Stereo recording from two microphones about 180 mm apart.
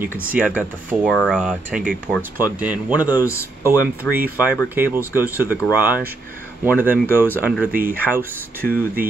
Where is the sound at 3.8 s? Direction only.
10° right (ahead or behind).